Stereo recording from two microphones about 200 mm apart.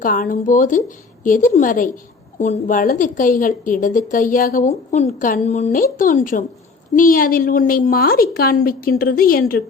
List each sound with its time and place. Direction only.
0.0 s a woman's voice: 45° left (ahead or behind)